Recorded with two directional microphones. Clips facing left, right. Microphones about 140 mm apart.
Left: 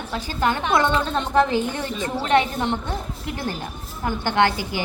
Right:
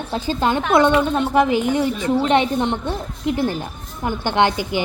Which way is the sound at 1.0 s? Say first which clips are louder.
Right 3 dB; 10° right (ahead or behind).